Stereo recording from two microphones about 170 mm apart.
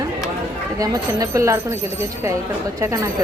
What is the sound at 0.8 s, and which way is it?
Speech, 20° right (ahead or behind).